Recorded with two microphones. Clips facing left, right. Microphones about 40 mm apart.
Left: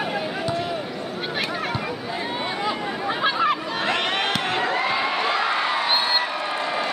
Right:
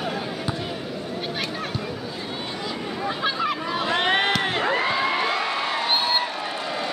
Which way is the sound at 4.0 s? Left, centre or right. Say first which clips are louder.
Right 3 dB; right.